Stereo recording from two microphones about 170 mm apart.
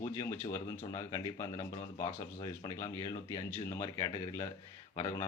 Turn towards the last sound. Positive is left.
turn(degrees=20)  # may be behind; listen again after turning